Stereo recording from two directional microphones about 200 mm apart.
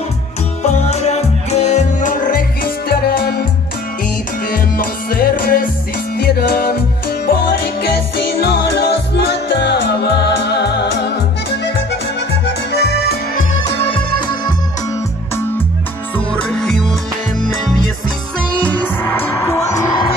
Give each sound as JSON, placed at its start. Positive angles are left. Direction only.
{"t": 0.6, "sound": "music", "side_deg": 35}
{"t": 4.5, "sound": "music", "side_deg": 45}
{"t": 13.7, "sound": "music", "side_deg": 30}
{"t": 16.3, "sound": "music", "side_deg": 5}
{"t": 18.5, "sound": "music", "side_deg": 5}